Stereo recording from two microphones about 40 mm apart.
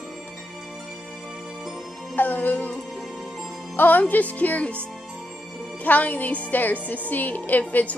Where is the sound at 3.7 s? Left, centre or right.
Left.